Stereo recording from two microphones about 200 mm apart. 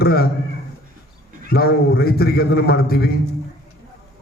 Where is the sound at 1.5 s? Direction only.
50° left (ahead or behind).